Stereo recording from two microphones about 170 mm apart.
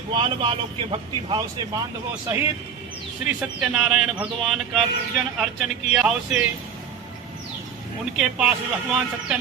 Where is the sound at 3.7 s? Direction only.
5° right (ahead or behind).